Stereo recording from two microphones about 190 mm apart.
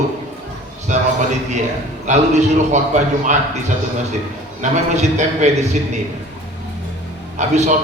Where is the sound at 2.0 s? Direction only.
40° right (ahead or behind).